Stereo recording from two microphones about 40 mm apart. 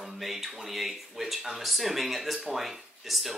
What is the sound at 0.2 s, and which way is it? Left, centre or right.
Speech, centre.